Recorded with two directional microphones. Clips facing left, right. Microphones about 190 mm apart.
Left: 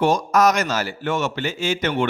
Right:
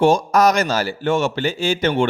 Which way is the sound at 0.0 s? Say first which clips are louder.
Right 3 dB; 30° right (ahead or behind).